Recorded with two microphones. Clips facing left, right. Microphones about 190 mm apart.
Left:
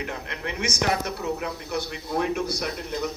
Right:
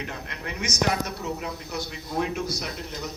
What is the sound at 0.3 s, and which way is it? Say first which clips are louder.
Speech: left 3 dB; 55° left (ahead or behind).